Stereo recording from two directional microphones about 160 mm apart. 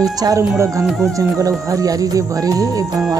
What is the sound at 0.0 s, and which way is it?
Speech, 25° right (ahead or behind).